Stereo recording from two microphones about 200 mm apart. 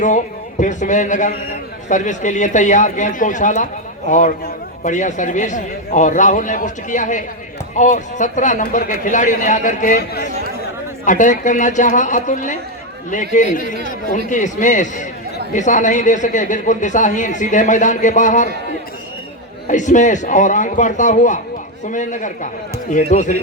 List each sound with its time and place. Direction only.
0.6 s a man's voice: 40° left (ahead or behind)
19.6 s a man's voice: 40° left (ahead or behind)